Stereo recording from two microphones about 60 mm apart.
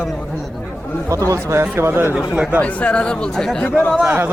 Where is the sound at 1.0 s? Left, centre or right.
Right.